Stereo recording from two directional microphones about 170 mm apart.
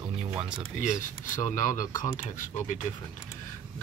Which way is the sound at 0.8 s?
50° left (ahead or behind).